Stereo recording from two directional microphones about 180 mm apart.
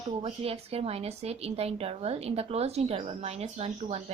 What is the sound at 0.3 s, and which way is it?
Speech, 35° right (ahead or behind).